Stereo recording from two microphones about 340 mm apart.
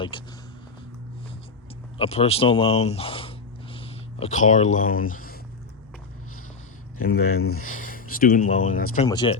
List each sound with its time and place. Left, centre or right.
0.1 s speech: centre
2.0 s speech: centre
7.0 s speech: left
8.1 s speech: left